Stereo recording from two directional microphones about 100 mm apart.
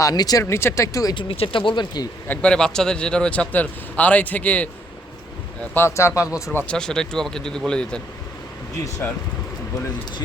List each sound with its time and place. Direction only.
0.0 s speech: 40° left (ahead or behind)
1.1 s speech: 60° left (ahead or behind)
2.2 s a man's voice: 15° left (ahead or behind)
5.7 s speech: 25° left (ahead or behind)
6.7 s speech: 5° left (ahead or behind)
9.0 s speech: 20° left (ahead or behind)